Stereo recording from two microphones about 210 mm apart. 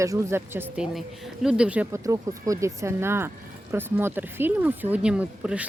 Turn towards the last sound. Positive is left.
turn(degrees=-5)  # may be behind; listen again after turning